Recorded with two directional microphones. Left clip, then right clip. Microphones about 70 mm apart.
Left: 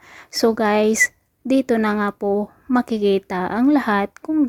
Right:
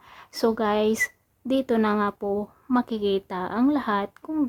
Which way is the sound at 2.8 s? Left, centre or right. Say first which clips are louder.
Left 6 dB; left.